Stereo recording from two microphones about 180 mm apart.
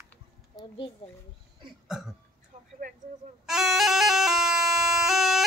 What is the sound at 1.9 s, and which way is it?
Speech, centre (ahead or behind).